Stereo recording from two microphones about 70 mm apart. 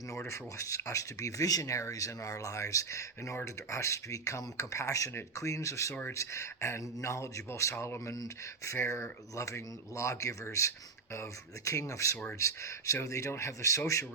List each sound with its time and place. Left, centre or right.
0.3 s speech: left
5.9 s speech: left
6.1 s speech: left